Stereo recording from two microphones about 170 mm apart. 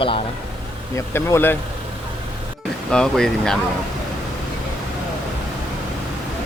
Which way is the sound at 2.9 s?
5° left (ahead or behind).